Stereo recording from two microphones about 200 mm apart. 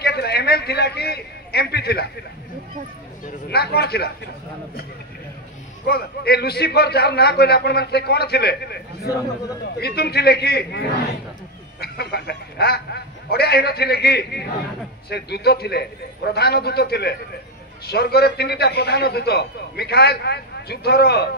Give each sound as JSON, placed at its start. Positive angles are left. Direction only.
{"t": 0.0, "sound": "a man's voice", "side_deg": 55}
{"t": 3.3, "sound": "a man's voice", "side_deg": 55}
{"t": 5.9, "sound": "a man's voice", "side_deg": 50}